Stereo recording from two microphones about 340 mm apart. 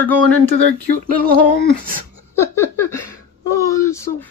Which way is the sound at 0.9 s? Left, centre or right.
Left.